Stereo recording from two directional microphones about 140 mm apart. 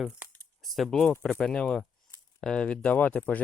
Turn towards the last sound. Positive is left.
turn(degrees=10)  # may be behind; listen again after turning